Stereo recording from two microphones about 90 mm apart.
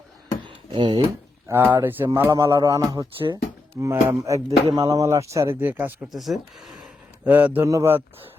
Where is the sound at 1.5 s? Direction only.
25° right (ahead or behind).